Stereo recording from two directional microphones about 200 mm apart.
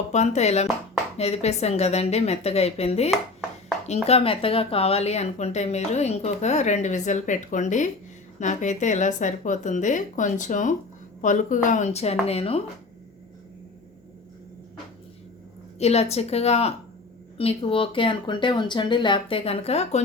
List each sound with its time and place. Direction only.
0.1 s speech: 35° left (ahead or behind)
15.8 s speech: 30° left (ahead or behind)